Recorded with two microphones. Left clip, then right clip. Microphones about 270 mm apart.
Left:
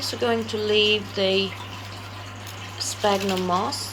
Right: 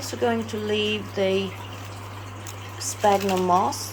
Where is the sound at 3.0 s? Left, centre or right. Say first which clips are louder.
Right 3 dB; centre.